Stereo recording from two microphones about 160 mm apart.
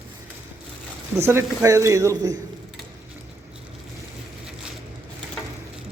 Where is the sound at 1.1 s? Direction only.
15° right (ahead or behind).